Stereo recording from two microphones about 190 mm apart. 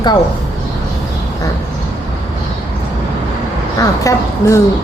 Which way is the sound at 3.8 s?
15° left (ahead or behind).